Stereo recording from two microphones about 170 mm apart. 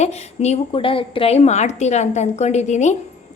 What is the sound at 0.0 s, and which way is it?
A woman's voice, 40° left (ahead or behind).